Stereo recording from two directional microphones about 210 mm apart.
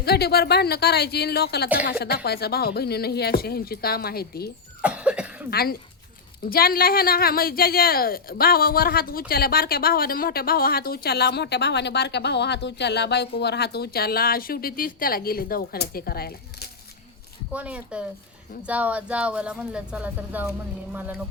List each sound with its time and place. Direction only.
0.0 s speech: 50° left (ahead or behind)
4.8 s cough: 5° right (ahead or behind)
5.5 s speech: 45° left (ahead or behind)
17.5 s a woman's voice: 5° right (ahead or behind)